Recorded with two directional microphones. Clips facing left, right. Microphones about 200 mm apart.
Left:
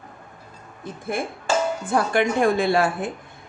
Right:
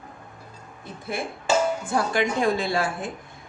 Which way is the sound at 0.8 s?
50° left (ahead or behind).